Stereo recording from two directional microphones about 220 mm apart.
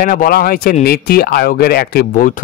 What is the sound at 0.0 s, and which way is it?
Speech, 40° left (ahead or behind).